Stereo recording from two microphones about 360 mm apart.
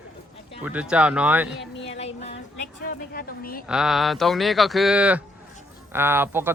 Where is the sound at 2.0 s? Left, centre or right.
Centre.